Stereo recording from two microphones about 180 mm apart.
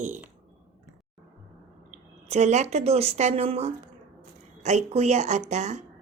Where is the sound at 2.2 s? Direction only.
40° right (ahead or behind).